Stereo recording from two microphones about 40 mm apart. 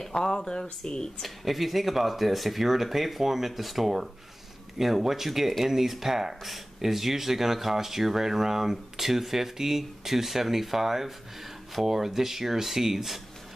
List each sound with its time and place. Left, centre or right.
0.0 s speech: centre
1.2 s speech: centre